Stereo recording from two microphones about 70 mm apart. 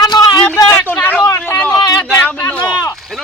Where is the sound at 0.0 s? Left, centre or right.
Left.